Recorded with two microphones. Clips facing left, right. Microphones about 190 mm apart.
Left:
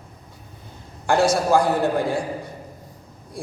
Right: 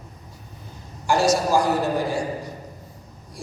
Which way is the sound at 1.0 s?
55° left (ahead or behind).